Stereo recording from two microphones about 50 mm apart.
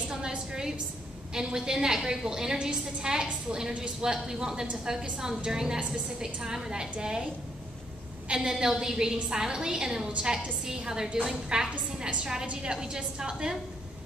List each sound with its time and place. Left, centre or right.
0.1 s a sound: centre
1.3 s a woman's voice: centre
8.3 s a woman's voice: centre